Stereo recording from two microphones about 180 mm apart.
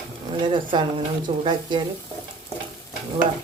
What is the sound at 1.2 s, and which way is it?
Speech, 25° right (ahead or behind).